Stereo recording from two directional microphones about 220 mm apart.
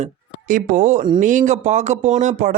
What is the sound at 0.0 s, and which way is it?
Speech, 35° right (ahead or behind).